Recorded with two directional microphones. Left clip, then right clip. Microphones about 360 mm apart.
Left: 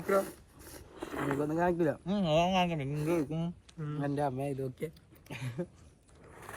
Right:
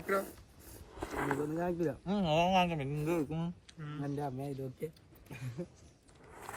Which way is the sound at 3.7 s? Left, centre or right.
Centre.